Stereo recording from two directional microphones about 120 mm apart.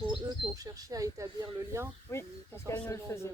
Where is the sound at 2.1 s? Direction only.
25° left (ahead or behind).